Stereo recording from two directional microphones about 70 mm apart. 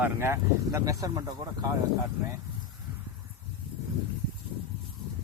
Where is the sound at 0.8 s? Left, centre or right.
Right.